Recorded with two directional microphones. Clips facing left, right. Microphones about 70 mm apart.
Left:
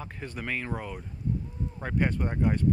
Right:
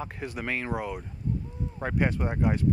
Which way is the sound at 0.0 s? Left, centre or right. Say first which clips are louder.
Right 3 dB; centre.